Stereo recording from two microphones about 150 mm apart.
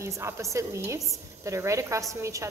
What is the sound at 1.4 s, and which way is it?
A woman's voice, 20° right (ahead or behind).